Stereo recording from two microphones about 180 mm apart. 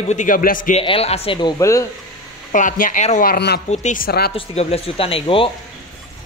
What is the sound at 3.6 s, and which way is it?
Speech, 45° left (ahead or behind).